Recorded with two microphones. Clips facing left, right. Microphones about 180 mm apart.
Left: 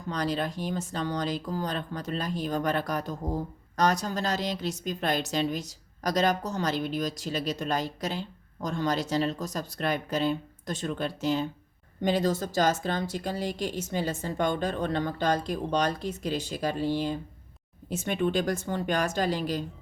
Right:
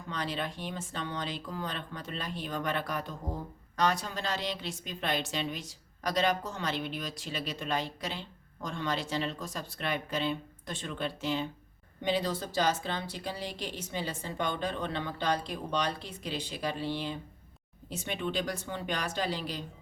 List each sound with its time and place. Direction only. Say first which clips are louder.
0.1 s a woman's voice: left 6 dB; 40° left (ahead or behind)